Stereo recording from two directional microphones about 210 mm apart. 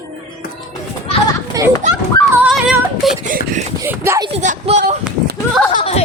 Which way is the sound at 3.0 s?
Centre (ahead or behind).